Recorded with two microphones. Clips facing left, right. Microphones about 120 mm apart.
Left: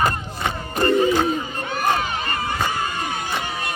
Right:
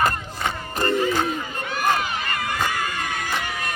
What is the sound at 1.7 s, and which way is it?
Battle cry, 30° left (ahead or behind).